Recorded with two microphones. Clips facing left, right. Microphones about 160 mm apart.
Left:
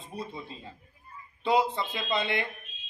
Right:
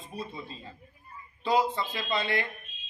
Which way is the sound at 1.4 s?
25° left (ahead or behind).